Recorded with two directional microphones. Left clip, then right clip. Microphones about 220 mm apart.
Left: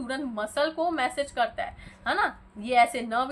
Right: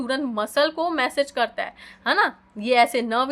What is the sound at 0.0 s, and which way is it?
A woman's voice, 50° right (ahead or behind).